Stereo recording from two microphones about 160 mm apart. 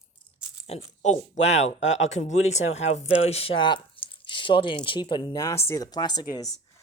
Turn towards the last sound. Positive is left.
turn(degrees=25)  # may be behind; listen again after turning